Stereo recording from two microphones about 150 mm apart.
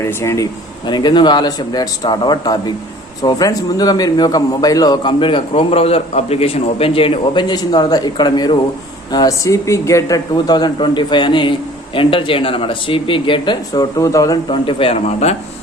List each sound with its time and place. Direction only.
0.0 s speech: 20° left (ahead or behind)
0.9 s a man's voice: 30° left (ahead or behind)
14.5 s speech: 35° left (ahead or behind)